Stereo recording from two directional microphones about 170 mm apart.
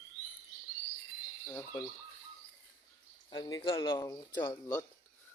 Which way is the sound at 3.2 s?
25° left (ahead or behind).